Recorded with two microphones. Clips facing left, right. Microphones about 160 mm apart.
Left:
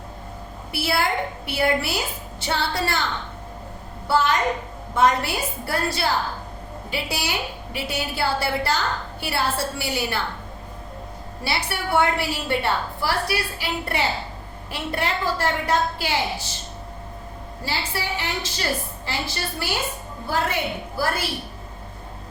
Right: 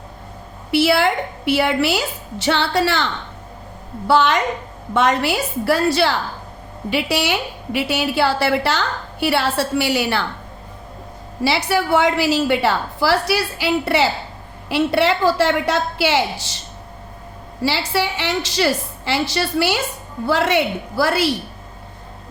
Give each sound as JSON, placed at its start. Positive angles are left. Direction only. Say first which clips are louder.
{"t": 0.7, "sound": "a woman's voice", "louder": "right 8 dB", "side_deg": -85}
{"t": 4.0, "sound": "a woman's voice", "louder": "right 4 dB", "side_deg": -85}
{"t": 6.9, "sound": "a woman's voice", "louder": "right 8 dB", "side_deg": -75}
{"t": 11.4, "sound": "a woman's voice", "louder": "right 9 dB", "side_deg": -90}
{"t": 17.6, "sound": "a woman's voice", "louder": "right 9 dB", "side_deg": -90}